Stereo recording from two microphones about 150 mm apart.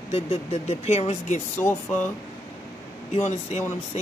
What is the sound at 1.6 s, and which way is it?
Speech, 15° left (ahead or behind).